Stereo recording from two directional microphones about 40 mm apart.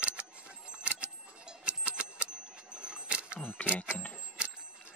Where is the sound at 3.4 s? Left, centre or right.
Left.